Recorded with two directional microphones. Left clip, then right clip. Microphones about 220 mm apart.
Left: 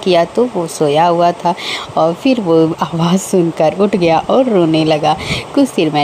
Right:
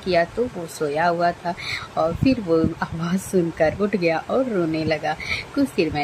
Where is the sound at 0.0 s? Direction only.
30° left (ahead or behind).